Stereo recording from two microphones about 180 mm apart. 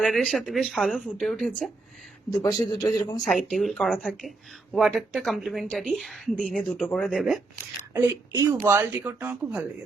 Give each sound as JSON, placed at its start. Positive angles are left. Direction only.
{"t": 0.0, "sound": "speech", "side_deg": 0}
{"t": 2.4, "sound": "a man's voice", "side_deg": 20}
{"t": 3.5, "sound": "speech", "side_deg": 0}
{"t": 7.9, "sound": "speech", "side_deg": -15}